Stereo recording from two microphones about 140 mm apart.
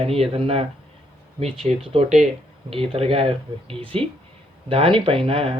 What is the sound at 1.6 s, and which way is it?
Speech, 45° right (ahead or behind).